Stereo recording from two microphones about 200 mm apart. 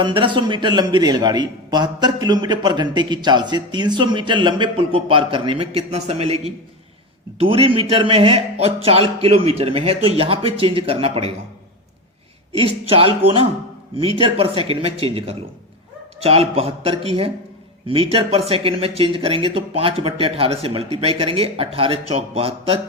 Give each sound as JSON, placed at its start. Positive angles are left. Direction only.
{"t": 0.0, "sound": "a man's voice", "side_deg": -25}
{"t": 12.5, "sound": "a man's voice", "side_deg": -30}